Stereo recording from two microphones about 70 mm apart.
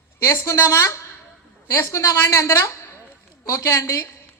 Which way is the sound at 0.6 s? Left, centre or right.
Left.